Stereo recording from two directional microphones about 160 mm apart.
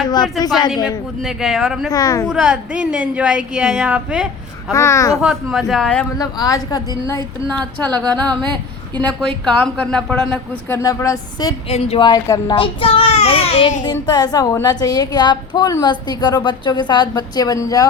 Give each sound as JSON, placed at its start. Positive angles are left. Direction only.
{"t": 0.1, "sound": "a woman's voice", "side_deg": 25}
{"t": 1.2, "sound": "a woman's voice", "side_deg": -5}
{"t": 1.9, "sound": "a woman's voice", "side_deg": 20}
{"t": 2.2, "sound": "a woman's voice", "side_deg": -5}
{"t": 4.7, "sound": "a woman's voice", "side_deg": 20}
{"t": 5.2, "sound": "a woman's voice", "side_deg": 0}
{"t": 6.1, "sound": "a woman's voice", "side_deg": 25}
{"t": 7.8, "sound": "speech", "side_deg": 10}
{"t": 10.8, "sound": "a woman's voice", "side_deg": 20}
{"t": 11.7, "sound": "a child's voice", "side_deg": 40}
{"t": 12.0, "sound": "a child's voice", "side_deg": 25}
{"t": 13.8, "sound": "a woman's voice", "side_deg": 25}